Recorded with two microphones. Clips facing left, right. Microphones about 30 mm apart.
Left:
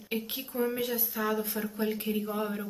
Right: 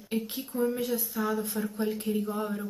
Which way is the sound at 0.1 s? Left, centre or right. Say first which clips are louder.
Right 2 dB; left.